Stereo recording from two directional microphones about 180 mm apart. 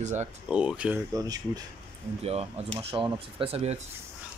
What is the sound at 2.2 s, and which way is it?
Speech, 35° right (ahead or behind).